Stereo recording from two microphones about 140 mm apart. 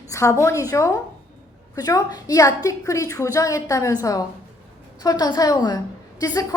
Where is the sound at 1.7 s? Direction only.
25° left (ahead or behind).